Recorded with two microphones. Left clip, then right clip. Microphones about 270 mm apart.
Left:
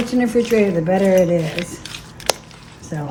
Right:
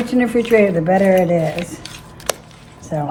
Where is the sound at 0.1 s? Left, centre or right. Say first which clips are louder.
Right 1 dB; right.